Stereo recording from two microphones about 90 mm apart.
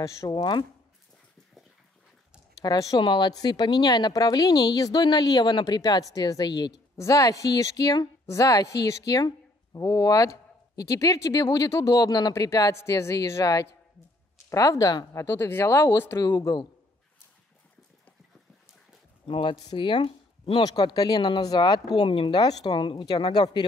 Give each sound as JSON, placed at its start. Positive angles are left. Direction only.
{"t": 0.0, "sound": "a woman's voice", "side_deg": 35}
{"t": 2.6, "sound": "speech", "side_deg": 45}
{"t": 3.0, "sound": "speech", "side_deg": 60}
{"t": 7.0, "sound": "a woman's voice", "side_deg": 40}
{"t": 15.2, "sound": "a woman's voice", "side_deg": 30}
{"t": 19.2, "sound": "speech", "side_deg": 75}
{"t": 19.7, "sound": "speech", "side_deg": 60}
{"t": 20.6, "sound": "speech", "side_deg": 50}
{"t": 22.4, "sound": "speech", "side_deg": 45}
{"t": 22.8, "sound": "speech", "side_deg": 65}